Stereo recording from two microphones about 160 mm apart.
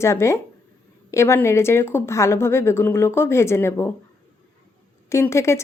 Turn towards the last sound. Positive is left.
turn(degrees=15)  # may be behind; listen again after turning